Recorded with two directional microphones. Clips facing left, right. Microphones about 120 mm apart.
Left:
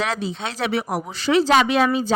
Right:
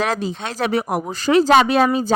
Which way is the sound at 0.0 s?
45° right (ahead or behind).